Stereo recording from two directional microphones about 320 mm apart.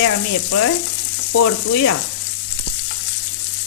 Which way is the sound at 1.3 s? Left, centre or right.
Left.